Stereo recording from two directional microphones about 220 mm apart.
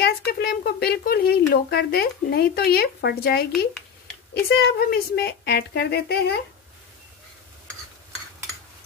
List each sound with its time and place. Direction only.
0.0 s speech: 45° left (ahead or behind)